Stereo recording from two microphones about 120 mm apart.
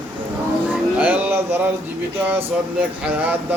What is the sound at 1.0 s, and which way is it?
Speech, 15° right (ahead or behind).